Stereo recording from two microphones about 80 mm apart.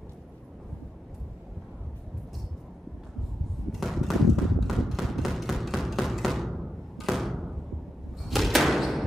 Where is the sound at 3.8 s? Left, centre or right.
Centre.